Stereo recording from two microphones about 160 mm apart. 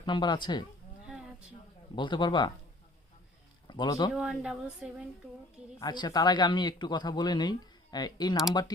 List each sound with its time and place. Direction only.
0.0 s speech: 30° left (ahead or behind)
2.0 s speech: 30° left (ahead or behind)
3.7 s speech: 25° left (ahead or behind)
4.1 s a woman's voice: 5° right (ahead or behind)
5.8 s speech: 25° left (ahead or behind)